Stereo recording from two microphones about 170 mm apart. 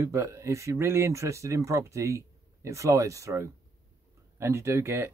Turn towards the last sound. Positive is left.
turn(degrees=-15)  # may be behind; listen again after turning